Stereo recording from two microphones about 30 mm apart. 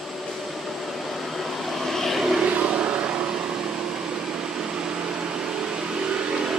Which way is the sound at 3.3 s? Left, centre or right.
Right.